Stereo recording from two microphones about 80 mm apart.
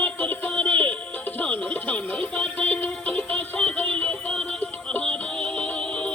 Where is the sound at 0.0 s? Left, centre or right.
Centre.